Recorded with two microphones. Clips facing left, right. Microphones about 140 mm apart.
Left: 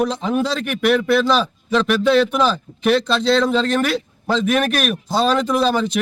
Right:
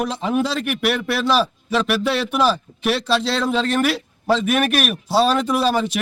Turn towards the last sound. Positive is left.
turn(degrees=-5)  # may be behind; listen again after turning